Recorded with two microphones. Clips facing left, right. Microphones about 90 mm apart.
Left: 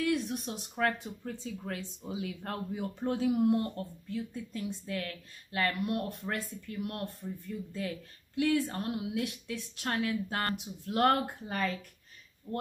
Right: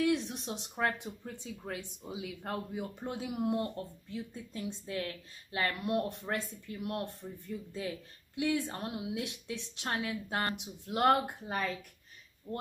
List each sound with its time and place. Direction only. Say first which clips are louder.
0.0 s a woman's voice: even; 25° right (ahead or behind)
8.4 s a woman's voice: left 3 dB; 15° right (ahead or behind)